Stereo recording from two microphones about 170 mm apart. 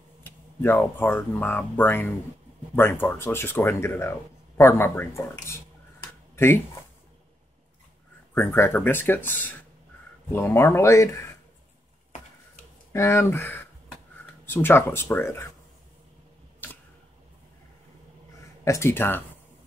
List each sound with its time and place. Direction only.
0.2 s speech: 15° left (ahead or behind)
8.4 s speech: 15° left (ahead or behind)
10.3 s speech: 15° left (ahead or behind)
12.9 s speech: 15° left (ahead or behind)
16.6 s camera: 10° left (ahead or behind)
18.6 s speech: 15° left (ahead or behind)